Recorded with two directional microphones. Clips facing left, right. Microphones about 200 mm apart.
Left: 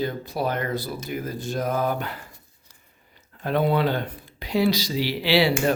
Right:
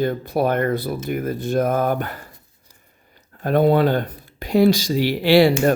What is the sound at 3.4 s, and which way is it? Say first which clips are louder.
Speech: right 6 dB; 45° right (ahead or behind).